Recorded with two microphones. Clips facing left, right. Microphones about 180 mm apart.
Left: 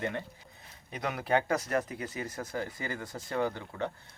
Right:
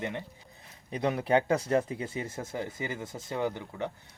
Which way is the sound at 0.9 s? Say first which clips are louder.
Right 4 dB; 30° right (ahead or behind).